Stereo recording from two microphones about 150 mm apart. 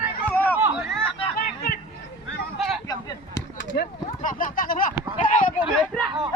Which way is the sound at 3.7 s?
65° left (ahead or behind).